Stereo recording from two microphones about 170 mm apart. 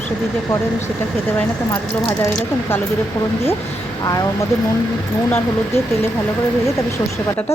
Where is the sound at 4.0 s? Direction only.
20° left (ahead or behind).